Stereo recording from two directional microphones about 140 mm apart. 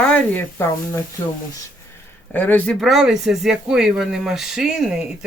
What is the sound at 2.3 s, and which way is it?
Speech, 15° left (ahead or behind).